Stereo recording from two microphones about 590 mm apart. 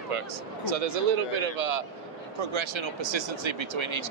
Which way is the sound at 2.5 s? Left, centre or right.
Right.